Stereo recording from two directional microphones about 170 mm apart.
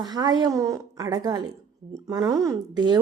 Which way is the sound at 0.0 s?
25° right (ahead or behind).